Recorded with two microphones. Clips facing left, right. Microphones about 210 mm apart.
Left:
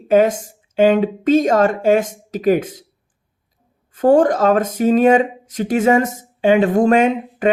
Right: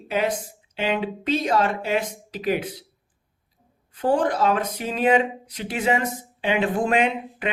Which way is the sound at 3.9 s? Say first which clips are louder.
Left 9 dB; 45° left (ahead or behind).